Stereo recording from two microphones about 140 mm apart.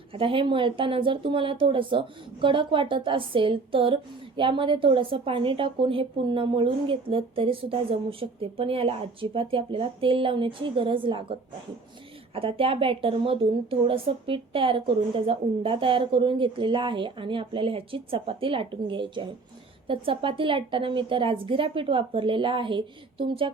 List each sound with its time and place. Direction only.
0.1 s a woman's voice: 40° right (ahead or behind)